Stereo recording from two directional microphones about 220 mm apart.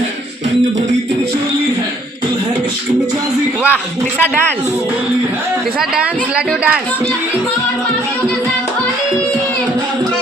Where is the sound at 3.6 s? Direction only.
10° left (ahead or behind).